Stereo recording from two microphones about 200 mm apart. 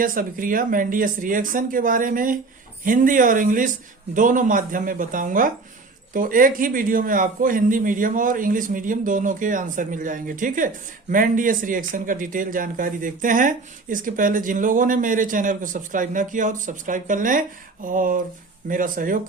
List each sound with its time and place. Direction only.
0.0 s a man's voice: 45° right (ahead or behind)